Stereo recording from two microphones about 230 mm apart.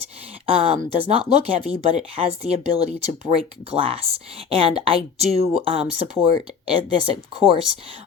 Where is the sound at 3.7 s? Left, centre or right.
Right.